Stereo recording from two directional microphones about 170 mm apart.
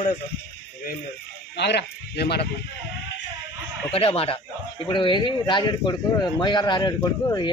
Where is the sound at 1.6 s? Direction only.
80° left.